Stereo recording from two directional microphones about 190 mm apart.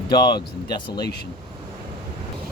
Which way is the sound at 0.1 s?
25° left (ahead or behind).